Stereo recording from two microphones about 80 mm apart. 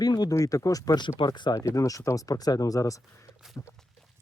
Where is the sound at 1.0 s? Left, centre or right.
Left.